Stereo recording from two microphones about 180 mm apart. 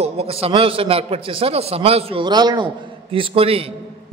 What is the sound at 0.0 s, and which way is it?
A man's voice, 35° right (ahead or behind).